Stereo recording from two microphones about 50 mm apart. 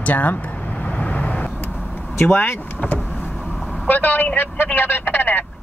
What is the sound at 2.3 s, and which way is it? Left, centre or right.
Speech, left.